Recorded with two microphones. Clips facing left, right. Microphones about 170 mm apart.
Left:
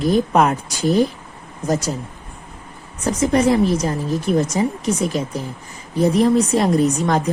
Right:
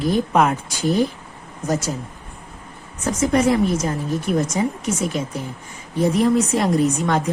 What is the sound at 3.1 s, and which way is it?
Speech, 30° left (ahead or behind).